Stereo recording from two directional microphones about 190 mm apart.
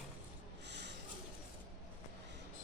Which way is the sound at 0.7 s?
65° right (ahead or behind).